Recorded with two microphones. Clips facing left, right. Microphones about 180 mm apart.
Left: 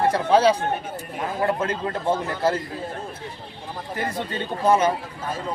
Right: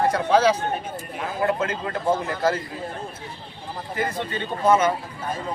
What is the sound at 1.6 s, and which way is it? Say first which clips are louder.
Speech: even; 30° left (ahead or behind).